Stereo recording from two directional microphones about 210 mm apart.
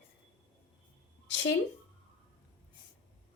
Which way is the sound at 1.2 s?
60° left (ahead or behind).